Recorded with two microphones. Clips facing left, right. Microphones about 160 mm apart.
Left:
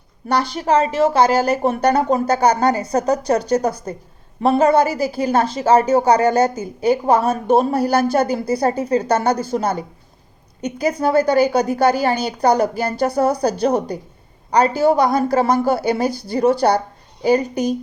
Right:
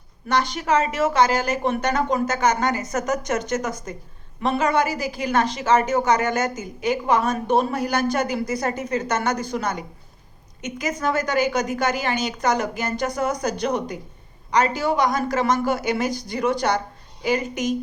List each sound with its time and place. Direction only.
0.3 s a woman's voice: 35° left (ahead or behind)